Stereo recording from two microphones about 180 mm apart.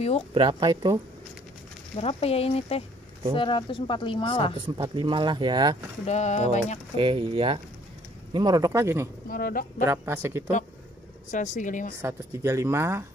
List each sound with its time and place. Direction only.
0.3 s speech: 30° right (ahead or behind)
2.0 s speech: 35° left (ahead or behind)
4.6 s speech: 25° right (ahead or behind)
6.0 s speech: 40° left (ahead or behind)
7.0 s speech: 30° right (ahead or behind)
9.3 s speech: 55° left (ahead or behind)
9.8 s speech: 15° right (ahead or behind)
11.2 s speech: 45° left (ahead or behind)
12.0 s speech: 15° right (ahead or behind)